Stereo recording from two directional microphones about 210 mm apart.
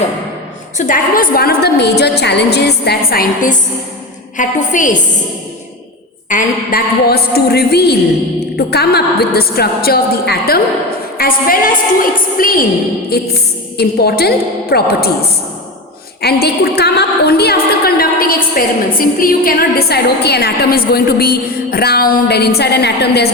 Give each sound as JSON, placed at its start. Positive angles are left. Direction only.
{"t": 0.8, "sound": "a woman's voice", "side_deg": 40}
{"t": 6.2, "sound": "a woman's voice", "side_deg": 40}
{"t": 16.2, "sound": "a woman's voice", "side_deg": 50}